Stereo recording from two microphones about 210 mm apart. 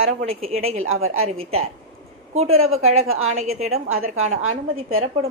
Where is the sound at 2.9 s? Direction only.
80° right.